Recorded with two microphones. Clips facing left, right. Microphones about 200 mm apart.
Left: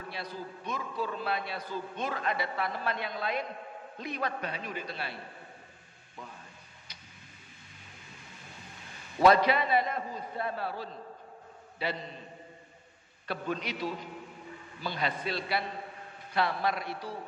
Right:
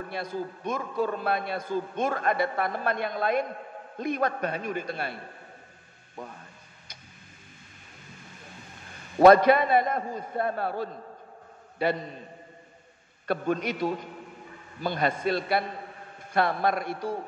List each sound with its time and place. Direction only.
0.1 s a man's voice: 50° right (ahead or behind)
9.2 s a man's voice: 50° right (ahead or behind)
13.3 s a man's voice: 50° right (ahead or behind)